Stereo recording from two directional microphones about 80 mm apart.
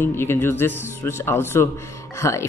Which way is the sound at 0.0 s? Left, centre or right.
Left.